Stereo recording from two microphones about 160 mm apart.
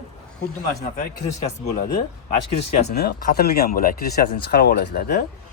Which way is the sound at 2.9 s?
75° left (ahead or behind).